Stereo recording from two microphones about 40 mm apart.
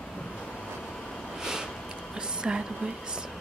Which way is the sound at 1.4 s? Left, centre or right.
Centre.